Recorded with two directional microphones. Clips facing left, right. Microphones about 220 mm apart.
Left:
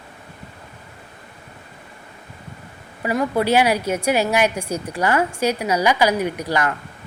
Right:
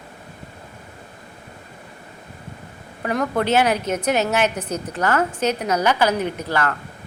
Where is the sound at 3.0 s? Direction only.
5° left (ahead or behind).